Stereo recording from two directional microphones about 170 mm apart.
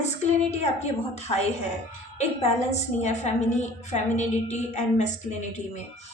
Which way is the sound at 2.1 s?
40° left (ahead or behind).